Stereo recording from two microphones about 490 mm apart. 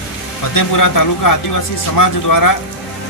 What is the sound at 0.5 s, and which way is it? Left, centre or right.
Speech, left.